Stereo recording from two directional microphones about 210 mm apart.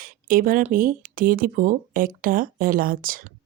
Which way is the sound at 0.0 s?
40° right (ahead or behind).